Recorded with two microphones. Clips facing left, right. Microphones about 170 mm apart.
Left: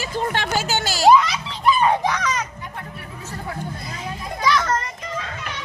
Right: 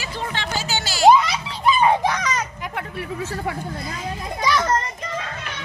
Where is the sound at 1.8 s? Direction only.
10° right (ahead or behind).